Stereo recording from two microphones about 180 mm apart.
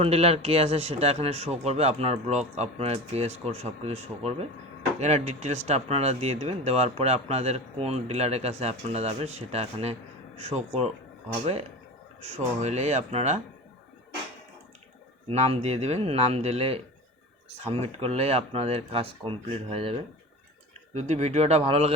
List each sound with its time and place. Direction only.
0.0 s speech: 35° right (ahead or behind)
12.2 s speech: 40° right (ahead or behind)
15.3 s speech: 35° right (ahead or behind)
18.0 s speech: 35° right (ahead or behind)
20.9 s speech: 40° right (ahead or behind)